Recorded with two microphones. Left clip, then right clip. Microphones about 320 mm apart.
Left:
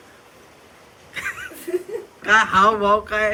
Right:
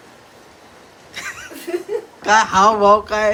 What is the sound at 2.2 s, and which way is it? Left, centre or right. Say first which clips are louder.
Speech: right 2 dB; centre.